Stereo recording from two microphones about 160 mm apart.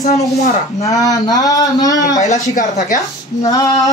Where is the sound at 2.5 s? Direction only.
50° left (ahead or behind).